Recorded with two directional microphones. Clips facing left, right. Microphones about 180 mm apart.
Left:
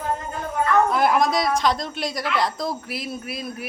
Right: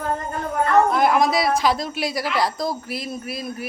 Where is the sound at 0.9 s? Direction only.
Centre (ahead or behind).